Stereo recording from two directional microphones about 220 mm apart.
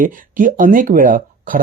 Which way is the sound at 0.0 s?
35° right (ahead or behind).